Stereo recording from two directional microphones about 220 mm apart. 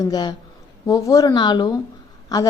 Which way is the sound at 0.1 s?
20° left (ahead or behind).